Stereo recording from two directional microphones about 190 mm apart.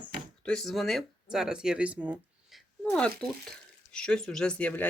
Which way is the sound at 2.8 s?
5° left (ahead or behind).